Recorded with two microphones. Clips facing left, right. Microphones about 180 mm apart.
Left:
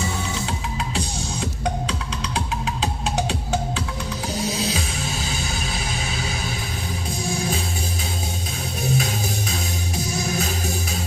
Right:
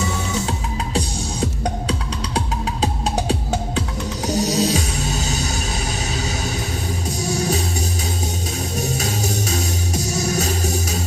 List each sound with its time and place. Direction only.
4.3 s music: 45° right (ahead or behind)
7.2 s music: 45° right (ahead or behind)
8.8 s music: 45° right (ahead or behind)